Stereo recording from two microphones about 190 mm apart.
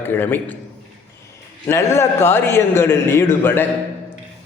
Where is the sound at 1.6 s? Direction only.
15° left (ahead or behind).